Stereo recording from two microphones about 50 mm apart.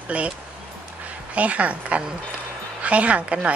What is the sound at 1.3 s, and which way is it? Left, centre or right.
Speech, right.